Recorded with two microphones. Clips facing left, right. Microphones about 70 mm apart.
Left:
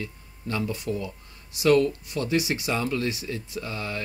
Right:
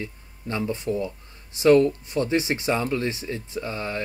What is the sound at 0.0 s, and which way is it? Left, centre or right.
Speech, right.